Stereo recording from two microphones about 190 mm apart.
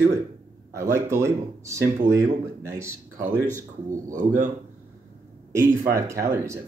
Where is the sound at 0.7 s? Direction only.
15° right (ahead or behind).